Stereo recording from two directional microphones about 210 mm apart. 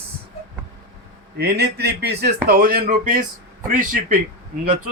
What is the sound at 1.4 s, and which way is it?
A man's voice, 50° right (ahead or behind).